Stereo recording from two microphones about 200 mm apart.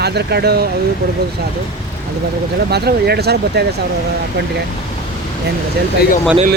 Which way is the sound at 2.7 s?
55° right (ahead or behind).